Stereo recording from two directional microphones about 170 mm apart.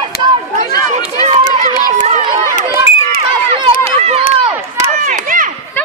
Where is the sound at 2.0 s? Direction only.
45° right (ahead or behind).